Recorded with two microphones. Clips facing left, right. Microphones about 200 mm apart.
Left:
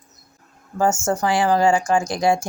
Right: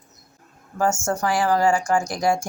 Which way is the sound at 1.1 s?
25° left (ahead or behind).